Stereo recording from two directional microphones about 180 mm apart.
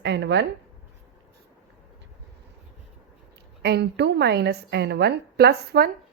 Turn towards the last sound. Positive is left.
turn(degrees=-60)  # may be behind; listen again after turning